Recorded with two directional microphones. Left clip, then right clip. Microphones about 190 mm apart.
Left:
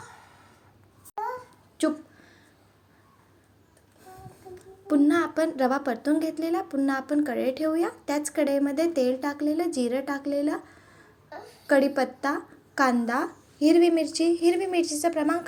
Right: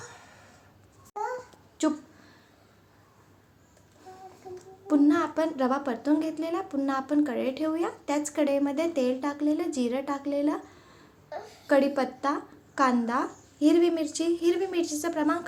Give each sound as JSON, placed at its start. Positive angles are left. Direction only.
{"t": 1.8, "sound": "speech", "side_deg": 20}
{"t": 4.9, "sound": "a woman's voice", "side_deg": 10}
{"t": 11.6, "sound": "a woman's voice", "side_deg": 15}